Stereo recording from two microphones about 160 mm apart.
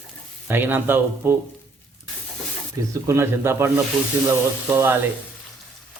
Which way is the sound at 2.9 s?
15° right (ahead or behind).